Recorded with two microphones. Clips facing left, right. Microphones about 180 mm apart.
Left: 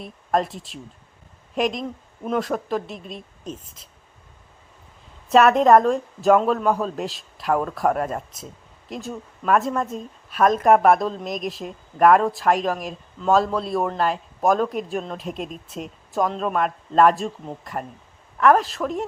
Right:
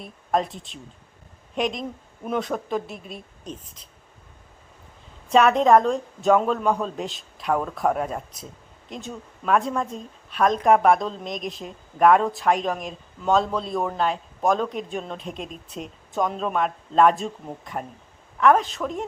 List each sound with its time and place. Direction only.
0.0 s speech: centre (ahead or behind)
5.3 s speech: centre (ahead or behind)